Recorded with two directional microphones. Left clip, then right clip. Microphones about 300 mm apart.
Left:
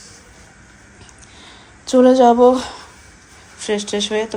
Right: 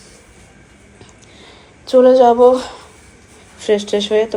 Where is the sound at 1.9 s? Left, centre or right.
Centre.